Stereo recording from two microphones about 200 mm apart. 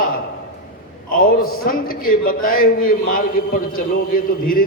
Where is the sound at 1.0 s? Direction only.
45° left (ahead or behind).